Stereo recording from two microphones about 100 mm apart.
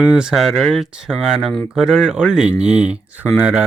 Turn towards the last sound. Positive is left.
turn(degrees=-10)  # may be behind; listen again after turning